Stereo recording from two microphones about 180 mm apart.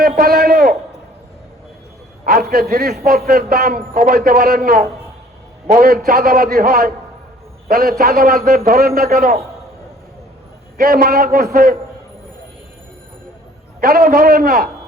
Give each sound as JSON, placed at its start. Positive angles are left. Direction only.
{"t": 0.0, "sound": "a sound", "side_deg": -60}
{"t": 2.5, "sound": "a man's voice", "side_deg": -60}
{"t": 10.8, "sound": "a man's voice", "side_deg": -55}
{"t": 13.8, "sound": "a man's voice", "side_deg": -55}